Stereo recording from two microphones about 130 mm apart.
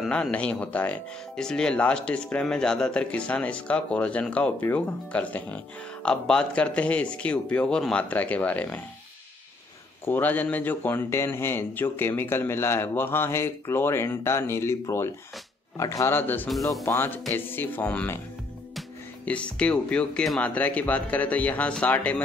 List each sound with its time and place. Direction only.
0.0 s speech: 10° left (ahead or behind)
10.0 s a man's voice: 15° left (ahead or behind)
16.4 s speech: centre (ahead or behind)
16.8 s a man's voice: 20° left (ahead or behind)
19.2 s speech: 10° left (ahead or behind)